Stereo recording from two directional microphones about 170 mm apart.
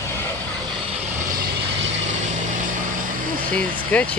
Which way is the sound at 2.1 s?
50° right (ahead or behind).